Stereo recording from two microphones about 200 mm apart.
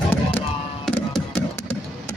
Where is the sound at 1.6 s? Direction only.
15° left (ahead or behind).